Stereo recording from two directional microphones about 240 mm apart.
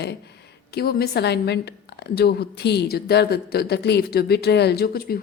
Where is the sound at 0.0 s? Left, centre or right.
Left.